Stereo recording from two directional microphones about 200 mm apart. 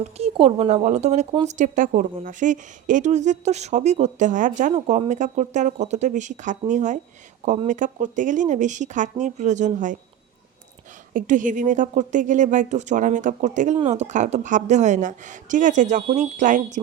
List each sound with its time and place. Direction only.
0.2 s a woman's voice: 30° right (ahead or behind)
1.5 s a woman's voice: 40° right (ahead or behind)
11.1 s a woman's voice: 40° right (ahead or behind)